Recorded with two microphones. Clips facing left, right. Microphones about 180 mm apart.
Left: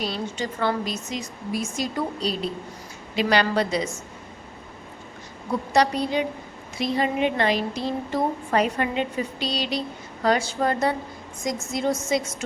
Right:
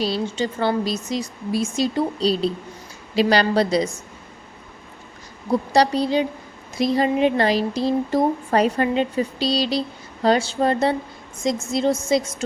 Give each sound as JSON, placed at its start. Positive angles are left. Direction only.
{"t": 0.0, "sound": "a woman's voice", "side_deg": -30}
{"t": 5.5, "sound": "a woman's voice", "side_deg": -35}